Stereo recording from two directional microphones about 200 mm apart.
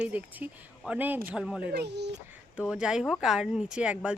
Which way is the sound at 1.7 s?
55° right (ahead or behind).